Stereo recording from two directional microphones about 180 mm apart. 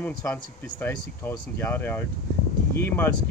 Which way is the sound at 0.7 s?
10° left (ahead or behind).